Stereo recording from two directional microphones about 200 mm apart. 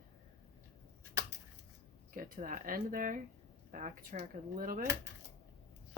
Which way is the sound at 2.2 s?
45° right (ahead or behind).